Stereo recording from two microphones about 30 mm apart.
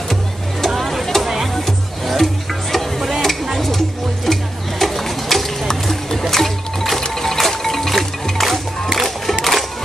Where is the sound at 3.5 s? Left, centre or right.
Centre.